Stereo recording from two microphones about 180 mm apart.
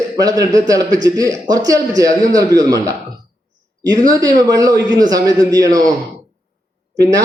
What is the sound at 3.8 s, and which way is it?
A man's voice, 20° right (ahead or behind).